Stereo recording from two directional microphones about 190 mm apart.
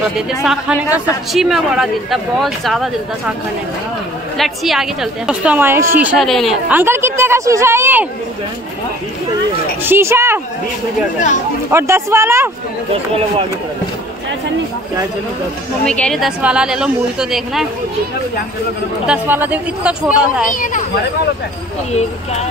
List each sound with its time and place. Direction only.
0.4 s speech: centre (ahead or behind)
4.4 s speech: centre (ahead or behind)
6.7 s a woman's voice: 10° right (ahead or behind)
9.8 s a woman's voice: 15° right (ahead or behind)
11.7 s a woman's voice: 15° right (ahead or behind)
15.8 s speech: 5° left (ahead or behind)
19.0 s a woman's voice: 10° right (ahead or behind)
20.5 s speech: 45° left (ahead or behind)